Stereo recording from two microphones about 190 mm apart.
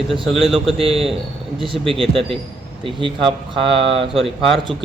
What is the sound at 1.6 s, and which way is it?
Speech, 25° right (ahead or behind).